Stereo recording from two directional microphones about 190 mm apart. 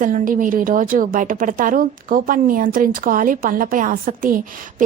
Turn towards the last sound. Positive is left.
turn(degrees=-45)  # may be behind; listen again after turning